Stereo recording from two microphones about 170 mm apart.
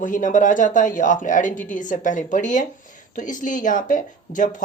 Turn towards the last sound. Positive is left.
turn(degrees=50)  # may be behind; listen again after turning